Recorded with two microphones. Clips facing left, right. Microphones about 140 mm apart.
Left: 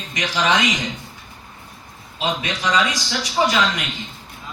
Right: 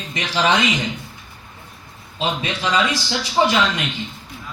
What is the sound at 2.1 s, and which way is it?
Speech, 30° right (ahead or behind).